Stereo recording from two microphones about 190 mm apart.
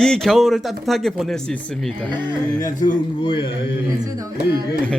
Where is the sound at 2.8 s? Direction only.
25° left (ahead or behind).